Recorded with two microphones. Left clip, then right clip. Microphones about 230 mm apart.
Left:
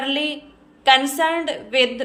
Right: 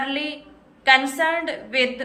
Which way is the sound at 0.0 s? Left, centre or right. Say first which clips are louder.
Left 3 dB; centre.